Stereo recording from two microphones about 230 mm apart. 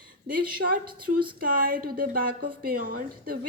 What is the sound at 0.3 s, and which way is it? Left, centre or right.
A woman's voice, right.